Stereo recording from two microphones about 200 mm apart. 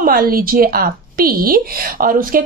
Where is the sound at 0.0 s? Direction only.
45° right (ahead or behind).